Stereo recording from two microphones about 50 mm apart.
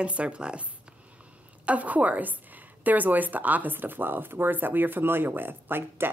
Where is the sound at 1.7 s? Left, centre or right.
Right.